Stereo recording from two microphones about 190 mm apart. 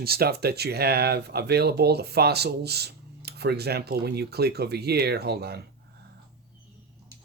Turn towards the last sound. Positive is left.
turn(degrees=-60)  # may be behind; listen again after turning